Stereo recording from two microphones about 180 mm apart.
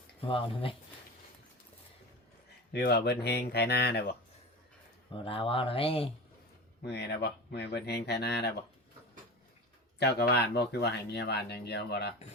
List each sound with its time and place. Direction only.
0.2 s speech: 30° left (ahead or behind)
2.7 s speech: 65° left (ahead or behind)
5.1 s speech: 30° left (ahead or behind)
6.8 s speech: 70° left (ahead or behind)
10.0 s speech: 65° left (ahead or behind)